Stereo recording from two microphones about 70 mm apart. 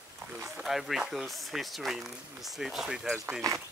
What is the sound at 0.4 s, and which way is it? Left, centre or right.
Speech, centre.